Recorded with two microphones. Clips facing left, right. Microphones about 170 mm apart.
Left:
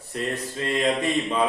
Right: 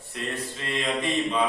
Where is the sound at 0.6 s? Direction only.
45° left (ahead or behind).